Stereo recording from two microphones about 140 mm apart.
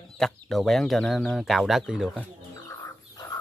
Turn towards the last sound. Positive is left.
turn(degrees=25)  # may be behind; listen again after turning